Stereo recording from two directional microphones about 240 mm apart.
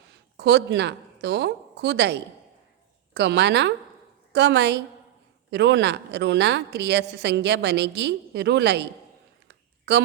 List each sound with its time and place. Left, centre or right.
0.3 s a woman's voice: right
3.2 s a woman's voice: right
9.5 s a sound: right